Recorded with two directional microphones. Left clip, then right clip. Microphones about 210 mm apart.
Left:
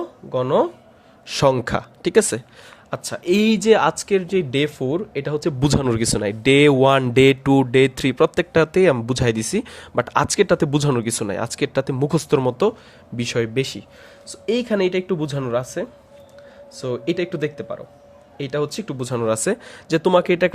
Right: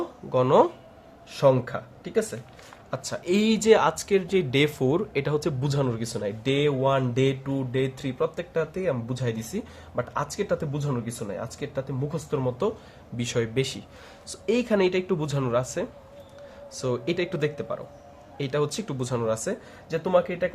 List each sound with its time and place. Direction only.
0.3 s speech: 15° left (ahead or behind)
1.3 s speech: 40° left (ahead or behind)
2.9 s speech: 35° left (ahead or behind); by 5.5 s 15° left (ahead or behind)
5.5 s speech: 35° left (ahead or behind)
13.1 s speech: 25° left (ahead or behind); by 20.5 s 45° left (ahead or behind)